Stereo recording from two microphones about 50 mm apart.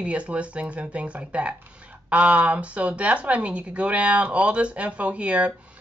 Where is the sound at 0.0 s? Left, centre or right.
Right.